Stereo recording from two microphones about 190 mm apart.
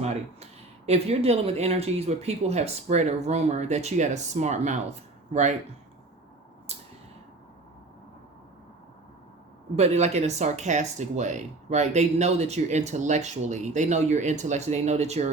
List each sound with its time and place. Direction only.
0.0 s speech: 35° right (ahead or behind)
6.7 s a sound: 35° right (ahead or behind)
9.7 s speech: 35° right (ahead or behind)